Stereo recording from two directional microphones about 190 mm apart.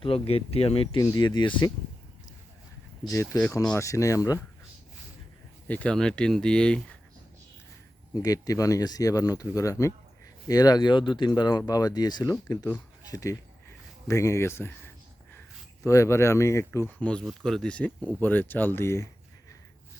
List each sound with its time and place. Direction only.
0.0 s speech: 30° left (ahead or behind)
3.1 s speech: 15° left (ahead or behind)
5.6 s speech: 5° left (ahead or behind)
8.1 s speech: 20° left (ahead or behind)
15.8 s speech: 15° left (ahead or behind)